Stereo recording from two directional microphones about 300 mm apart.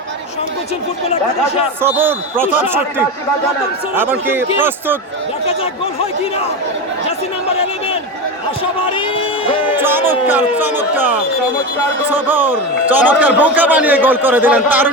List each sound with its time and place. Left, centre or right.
1.8 s speech: centre
8.9 s speech: centre
10.1 s a man's voice: centre